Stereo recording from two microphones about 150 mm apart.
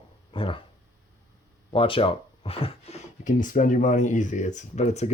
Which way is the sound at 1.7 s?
35° left (ahead or behind).